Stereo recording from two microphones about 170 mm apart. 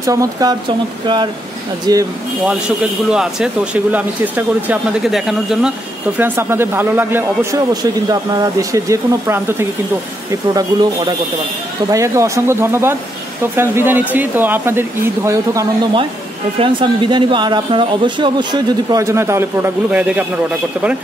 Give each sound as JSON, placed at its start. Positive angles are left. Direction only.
{"t": 0.0, "sound": "speech", "side_deg": -20}
{"t": 3.1, "sound": "speech", "side_deg": -5}
{"t": 7.7, "sound": "speech", "side_deg": -25}
{"t": 16.5, "sound": "speech", "side_deg": -30}